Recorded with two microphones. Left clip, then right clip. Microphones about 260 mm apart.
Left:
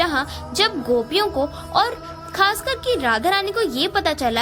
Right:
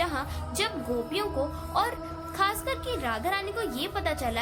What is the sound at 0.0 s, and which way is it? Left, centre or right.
A woman's voice, left.